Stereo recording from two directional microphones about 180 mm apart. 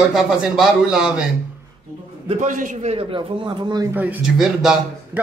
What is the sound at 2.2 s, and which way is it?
A man's voice, 45° right (ahead or behind).